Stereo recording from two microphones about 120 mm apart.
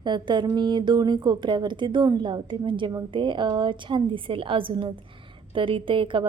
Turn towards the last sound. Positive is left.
turn(degrees=-45)  # may be behind; listen again after turning